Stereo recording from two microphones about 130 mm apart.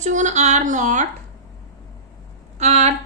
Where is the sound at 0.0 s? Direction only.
70° right (ahead or behind).